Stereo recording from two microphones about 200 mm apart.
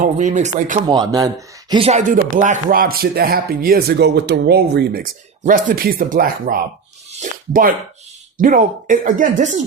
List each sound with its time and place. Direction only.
0.0 s speech: 35° right (ahead or behind)
0.9 s a man's voice: 20° right (ahead or behind)
1.7 s speech: 30° right (ahead or behind)